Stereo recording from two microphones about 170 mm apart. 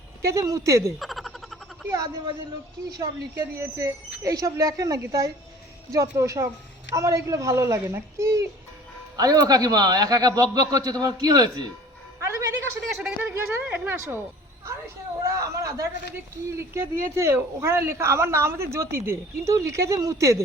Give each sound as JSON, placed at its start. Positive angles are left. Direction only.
{"t": 0.2, "sound": "speech", "side_deg": -15}
{"t": 0.9, "sound": "frog", "side_deg": 0}
{"t": 1.9, "sound": "a man's voice", "side_deg": -20}
{"t": 12.2, "sound": "a sound", "side_deg": -20}
{"t": 13.0, "sound": "speech", "side_deg": -5}
{"t": 15.3, "sound": "a sound", "side_deg": -20}
{"t": 16.1, "sound": "speech", "side_deg": -15}